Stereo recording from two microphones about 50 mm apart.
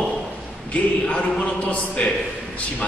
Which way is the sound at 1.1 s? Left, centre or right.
Left.